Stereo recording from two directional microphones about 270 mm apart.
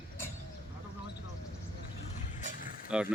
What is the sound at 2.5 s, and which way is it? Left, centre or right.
Vehicle, left.